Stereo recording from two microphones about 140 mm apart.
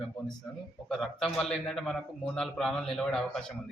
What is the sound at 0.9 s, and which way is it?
A man's voice, centre (ahead or behind).